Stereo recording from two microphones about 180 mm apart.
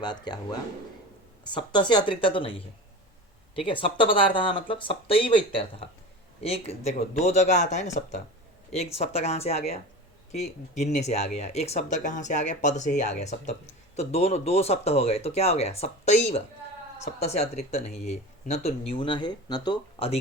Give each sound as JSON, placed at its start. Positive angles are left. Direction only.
{"t": 0.0, "sound": "speech", "side_deg": 25}
{"t": 1.5, "sound": "speech", "side_deg": 25}
{"t": 18.9, "sound": "speech", "side_deg": 25}